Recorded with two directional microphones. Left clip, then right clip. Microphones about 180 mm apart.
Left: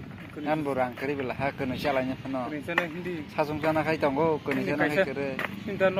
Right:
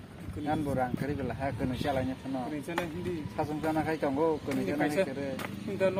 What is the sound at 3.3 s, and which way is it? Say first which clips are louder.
Speech: left 6 dB; 30° left (ahead or behind).